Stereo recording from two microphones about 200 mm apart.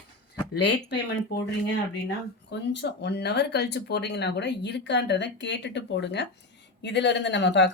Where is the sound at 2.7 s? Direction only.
55° left (ahead or behind).